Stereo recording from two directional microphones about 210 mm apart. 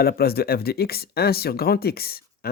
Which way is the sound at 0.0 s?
45° left (ahead or behind).